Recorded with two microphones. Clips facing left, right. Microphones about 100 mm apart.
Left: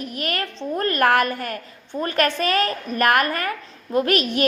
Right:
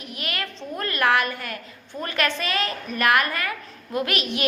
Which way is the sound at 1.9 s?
30° left (ahead or behind).